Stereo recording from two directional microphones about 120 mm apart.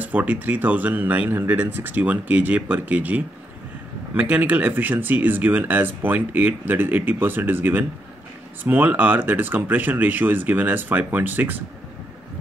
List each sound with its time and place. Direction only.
0.0 s speech: 10° right (ahead or behind)